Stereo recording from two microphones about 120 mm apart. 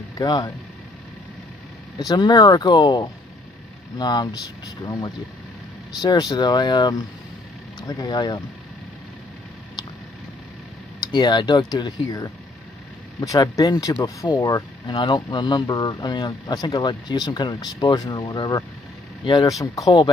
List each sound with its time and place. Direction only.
0.2 s speech: 35° left (ahead or behind)
2.0 s speech: 35° left (ahead or behind)
11.0 s speech: 35° left (ahead or behind)
19.6 s speech: 30° left (ahead or behind)